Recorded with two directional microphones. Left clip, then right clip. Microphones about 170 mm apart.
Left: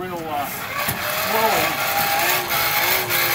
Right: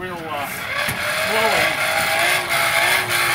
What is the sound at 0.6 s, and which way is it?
Vehicle, 5° left (ahead or behind).